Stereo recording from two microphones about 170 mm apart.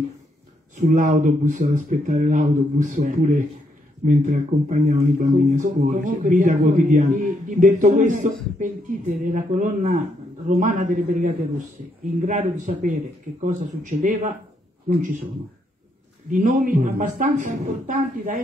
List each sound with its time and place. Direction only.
0.7 s speech: 45° right (ahead or behind)
16.3 s speech: 50° right (ahead or behind)